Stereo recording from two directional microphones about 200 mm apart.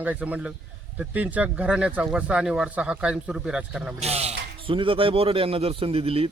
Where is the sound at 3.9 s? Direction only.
30° right (ahead or behind).